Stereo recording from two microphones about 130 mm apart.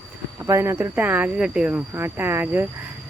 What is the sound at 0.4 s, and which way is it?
Speech, 20° right (ahead or behind).